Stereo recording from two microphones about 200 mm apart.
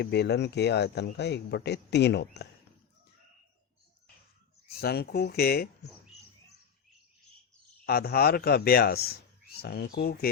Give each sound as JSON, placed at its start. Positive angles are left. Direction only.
{"t": 0.0, "sound": "speech", "side_deg": 55}
{"t": 4.8, "sound": "speech", "side_deg": 50}
{"t": 7.9, "sound": "speech", "side_deg": 50}